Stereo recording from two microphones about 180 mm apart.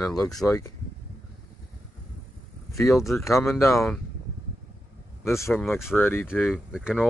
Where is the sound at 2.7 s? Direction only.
15° left (ahead or behind).